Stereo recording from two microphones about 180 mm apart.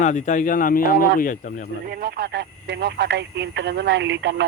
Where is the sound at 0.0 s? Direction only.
45° left (ahead or behind).